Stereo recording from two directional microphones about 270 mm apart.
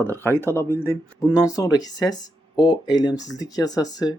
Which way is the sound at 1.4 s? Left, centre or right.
Centre.